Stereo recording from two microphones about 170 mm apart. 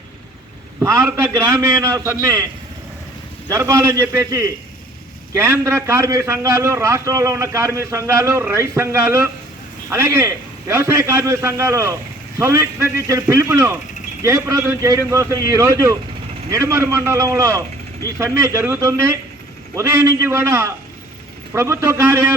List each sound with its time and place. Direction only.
0.8 s a man's voice: 15° right (ahead or behind)
3.5 s a man's voice: 15° right (ahead or behind)